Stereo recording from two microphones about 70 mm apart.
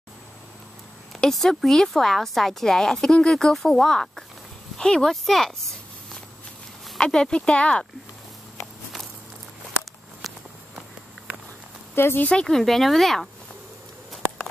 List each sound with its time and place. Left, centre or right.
1.2 s a woman's voice: centre
7.0 s a woman's voice: centre
10.2 s walk: centre
11.9 s speech: left
12.3 s speech: centre